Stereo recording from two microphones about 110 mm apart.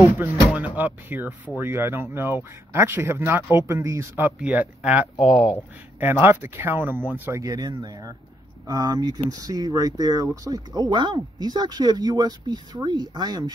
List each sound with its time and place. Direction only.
0.0 s speech: 25° right (ahead or behind)
0.7 s speech: 15° right (ahead or behind)
4.2 s speech: 15° right (ahead or behind)
5.2 s speech: centre (ahead or behind)
5.9 s speech: 20° right (ahead or behind)
7.4 s speech: 35° right (ahead or behind)